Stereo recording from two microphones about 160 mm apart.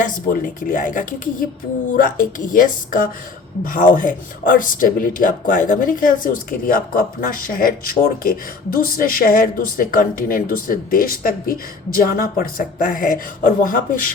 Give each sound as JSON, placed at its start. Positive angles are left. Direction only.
{"t": 0.0, "sound": "speech", "side_deg": 55}